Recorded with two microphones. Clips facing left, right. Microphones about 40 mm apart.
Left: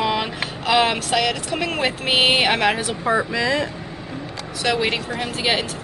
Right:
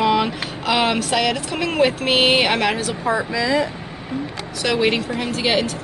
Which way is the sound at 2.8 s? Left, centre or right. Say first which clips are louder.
Even; left.